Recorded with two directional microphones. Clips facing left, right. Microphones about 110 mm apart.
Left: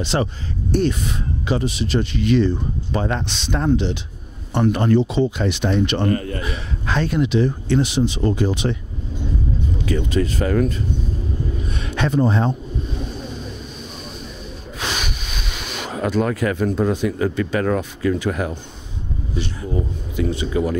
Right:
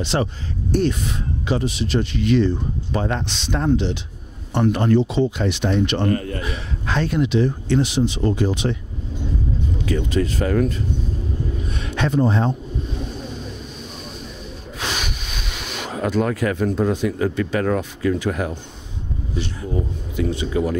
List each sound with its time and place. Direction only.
0.0 s speech: 10° left (ahead or behind)
9.8 s speech: 15° left (ahead or behind)
11.7 s a sound: 15° left (ahead or behind)
14.8 s a sound: 10° left (ahead or behind)
16.9 s speech: 15° left (ahead or behind)
20.2 s speech: 15° left (ahead or behind)